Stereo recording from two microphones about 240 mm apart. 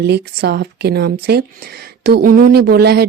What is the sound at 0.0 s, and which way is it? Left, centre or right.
Speech, right.